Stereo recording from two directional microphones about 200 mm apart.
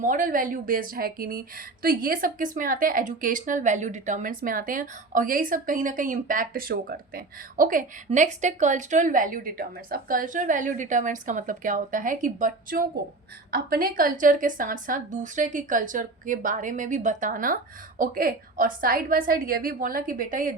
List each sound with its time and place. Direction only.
0.0 s a woman's voice: 40° right (ahead or behind)